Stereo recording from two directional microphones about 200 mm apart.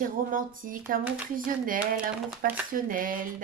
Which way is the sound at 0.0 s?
45° right (ahead or behind).